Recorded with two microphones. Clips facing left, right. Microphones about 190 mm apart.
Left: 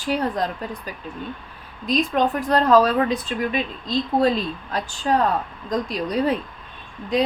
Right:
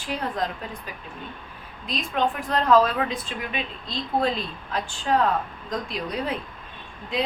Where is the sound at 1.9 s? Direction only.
40° left (ahead or behind).